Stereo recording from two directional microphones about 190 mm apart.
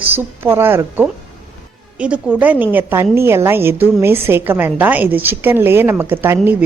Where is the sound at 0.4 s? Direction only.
10° right (ahead or behind).